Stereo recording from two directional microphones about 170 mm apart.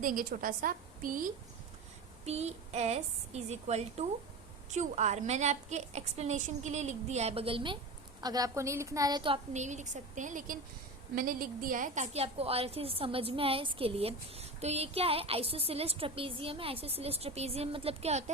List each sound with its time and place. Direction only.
0.0 s a woman's voice: 55° right (ahead or behind)
2.2 s a woman's voice: 40° right (ahead or behind)